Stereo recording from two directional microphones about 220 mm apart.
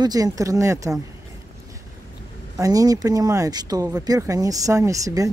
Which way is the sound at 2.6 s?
15° right (ahead or behind).